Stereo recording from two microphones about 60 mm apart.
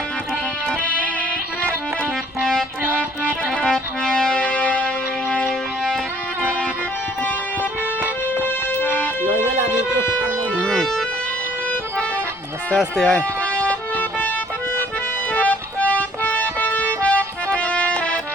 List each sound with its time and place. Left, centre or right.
2.4 s music: centre
8.4 s music: left
10.7 s music: centre
12.7 s speech: centre
13.1 s music: left
15.3 s music: left